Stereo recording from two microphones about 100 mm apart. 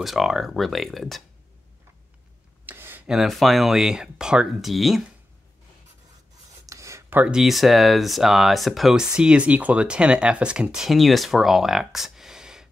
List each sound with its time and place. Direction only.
0.0 s speech: centre (ahead or behind)
2.6 s a sound: 20° right (ahead or behind)
3.1 s speech: centre (ahead or behind)
6.6 s writing: 35° right (ahead or behind)
7.2 s speech: 10° right (ahead or behind)